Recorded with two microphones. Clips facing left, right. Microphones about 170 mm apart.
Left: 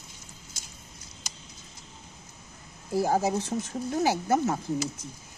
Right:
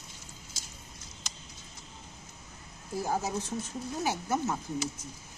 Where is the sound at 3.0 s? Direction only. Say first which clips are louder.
Left 7 dB; 80° left.